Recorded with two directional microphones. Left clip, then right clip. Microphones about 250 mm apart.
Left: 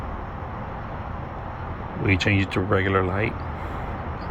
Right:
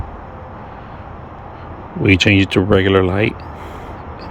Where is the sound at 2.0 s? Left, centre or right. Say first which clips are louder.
Right 10 dB; right.